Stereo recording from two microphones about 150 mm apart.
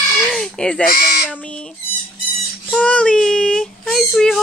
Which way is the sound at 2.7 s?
5° left (ahead or behind).